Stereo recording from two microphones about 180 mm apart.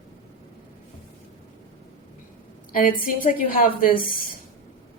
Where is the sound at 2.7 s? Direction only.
50° left (ahead or behind).